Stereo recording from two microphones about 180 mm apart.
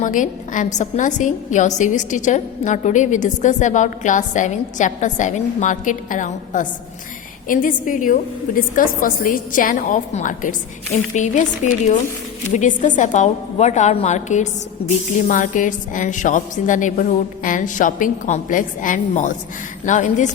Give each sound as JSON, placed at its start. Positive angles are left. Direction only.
{"t": 0.0, "sound": "a woman's voice", "side_deg": 45}